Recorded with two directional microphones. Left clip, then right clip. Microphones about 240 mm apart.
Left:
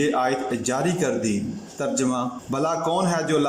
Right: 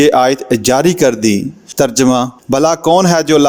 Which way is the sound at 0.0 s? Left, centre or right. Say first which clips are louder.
Right 12 dB; right.